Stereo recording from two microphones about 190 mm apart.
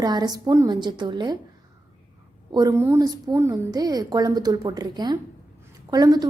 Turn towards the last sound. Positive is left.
turn(degrees=-20)  # may be behind; listen again after turning